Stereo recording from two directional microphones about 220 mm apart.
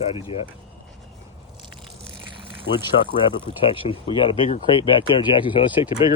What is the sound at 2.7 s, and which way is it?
Speech, 65° left (ahead or behind).